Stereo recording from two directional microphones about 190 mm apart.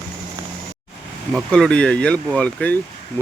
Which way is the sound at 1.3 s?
5° left (ahead or behind).